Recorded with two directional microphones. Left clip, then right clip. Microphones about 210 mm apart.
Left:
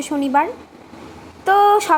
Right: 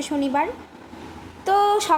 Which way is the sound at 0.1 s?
10° left (ahead or behind).